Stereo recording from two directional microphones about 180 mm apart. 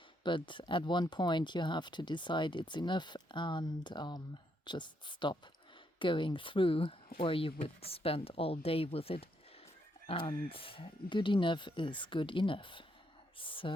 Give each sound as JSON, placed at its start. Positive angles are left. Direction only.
{"t": 0.2, "sound": "speech", "side_deg": 25}